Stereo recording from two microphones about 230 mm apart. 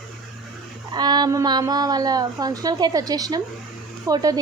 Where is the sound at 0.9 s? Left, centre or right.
Centre.